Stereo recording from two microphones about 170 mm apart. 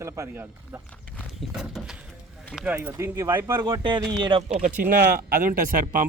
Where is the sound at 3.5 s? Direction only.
25° right (ahead or behind).